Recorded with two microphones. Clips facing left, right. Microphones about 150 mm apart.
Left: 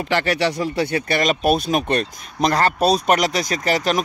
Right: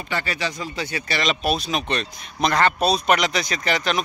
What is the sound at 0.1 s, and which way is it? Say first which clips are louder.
Speech: left 7 dB; 80° left.